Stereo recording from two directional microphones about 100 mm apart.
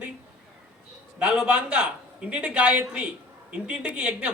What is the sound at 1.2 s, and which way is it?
A man's voice, 10° right (ahead or behind).